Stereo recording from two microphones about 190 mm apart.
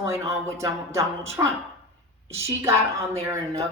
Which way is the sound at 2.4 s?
15° right (ahead or behind).